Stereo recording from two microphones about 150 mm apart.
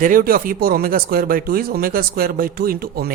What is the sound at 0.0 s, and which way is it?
A man's voice, 70° right (ahead or behind).